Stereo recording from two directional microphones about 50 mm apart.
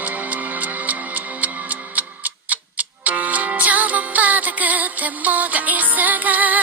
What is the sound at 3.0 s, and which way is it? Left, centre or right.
Music, right.